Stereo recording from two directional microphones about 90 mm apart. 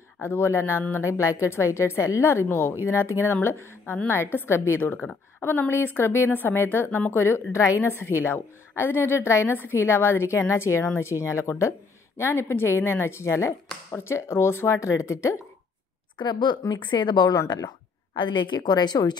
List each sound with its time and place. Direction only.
0.2 s a woman's voice: 30° left (ahead or behind)
16.2 s speech: 55° left (ahead or behind)
18.1 s speech: 60° left (ahead or behind)